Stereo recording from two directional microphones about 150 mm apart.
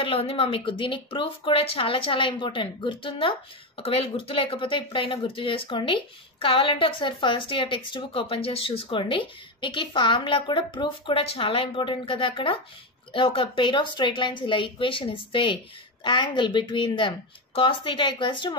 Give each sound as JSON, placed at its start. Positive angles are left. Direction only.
{"t": 0.0, "sound": "speech", "side_deg": 40}